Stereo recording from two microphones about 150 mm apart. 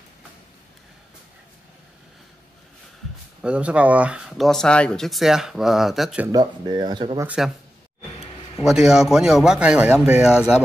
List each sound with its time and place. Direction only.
3.4 s speech: 10° right (ahead or behind)
6.3 s speech: 30° right (ahead or behind)
7.2 s speech: 5° right (ahead or behind)
8.6 s speech: 5° right (ahead or behind)